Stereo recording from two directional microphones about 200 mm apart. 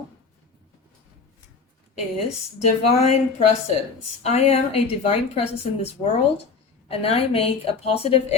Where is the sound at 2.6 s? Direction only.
35° left (ahead or behind).